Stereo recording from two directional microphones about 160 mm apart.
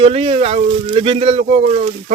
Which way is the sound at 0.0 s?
35° right (ahead or behind).